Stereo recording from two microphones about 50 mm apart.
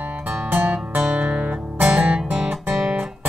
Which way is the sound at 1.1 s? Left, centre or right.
Right.